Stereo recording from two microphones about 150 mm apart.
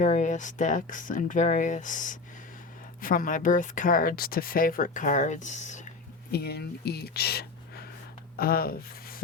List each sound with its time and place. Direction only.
0.0 s speech: 55° left (ahead or behind)
6.3 s speech: 90° left
8.4 s speech: 80° left